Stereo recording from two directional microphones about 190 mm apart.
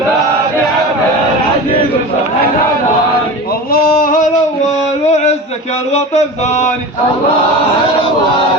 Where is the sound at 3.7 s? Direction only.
50° left (ahead or behind).